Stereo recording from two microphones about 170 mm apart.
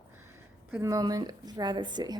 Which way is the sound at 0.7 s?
20° right (ahead or behind).